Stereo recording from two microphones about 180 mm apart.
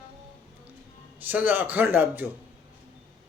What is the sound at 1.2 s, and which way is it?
A man's voice, 10° right (ahead or behind).